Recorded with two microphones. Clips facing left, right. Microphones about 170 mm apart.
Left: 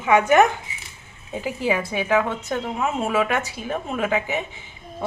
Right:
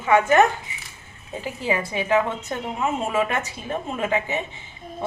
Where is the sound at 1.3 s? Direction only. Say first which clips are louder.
Left 2 dB; 15° left (ahead or behind).